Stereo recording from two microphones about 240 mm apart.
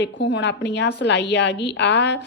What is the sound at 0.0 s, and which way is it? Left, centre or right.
A woman's voice, left.